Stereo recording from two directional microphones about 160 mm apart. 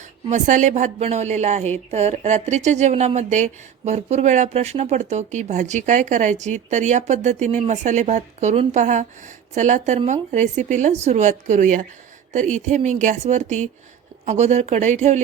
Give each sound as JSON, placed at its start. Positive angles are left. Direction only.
{"t": 0.3, "sound": "a woman's voice", "side_deg": -50}